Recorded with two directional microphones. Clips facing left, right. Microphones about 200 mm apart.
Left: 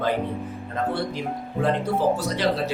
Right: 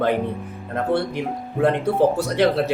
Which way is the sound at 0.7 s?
60° right (ahead or behind).